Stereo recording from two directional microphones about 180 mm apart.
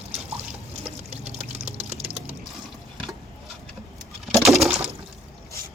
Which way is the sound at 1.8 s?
35° right (ahead or behind).